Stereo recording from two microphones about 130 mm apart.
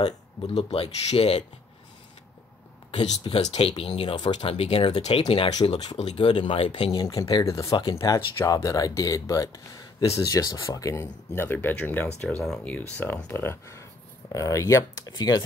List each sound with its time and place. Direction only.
0.6 s speech: 50° left (ahead or behind)
2.9 s speech: 40° left (ahead or behind)
3.3 s speech: 50° left (ahead or behind)
5.6 s speech: 30° left (ahead or behind)
6.9 s speech: 30° left (ahead or behind)